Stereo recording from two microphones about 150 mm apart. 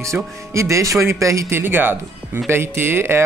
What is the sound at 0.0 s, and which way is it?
Speech, 20° right (ahead or behind).